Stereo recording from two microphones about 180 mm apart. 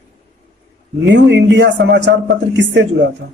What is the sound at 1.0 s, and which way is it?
A man's voice, 75° right (ahead or behind).